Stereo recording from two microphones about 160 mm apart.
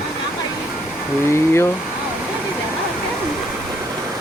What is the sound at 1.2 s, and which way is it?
Speech, 15° left (ahead or behind).